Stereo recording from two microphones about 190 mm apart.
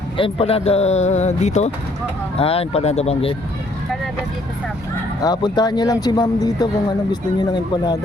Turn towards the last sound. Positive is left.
turn(degrees=20)  # may be behind; listen again after turning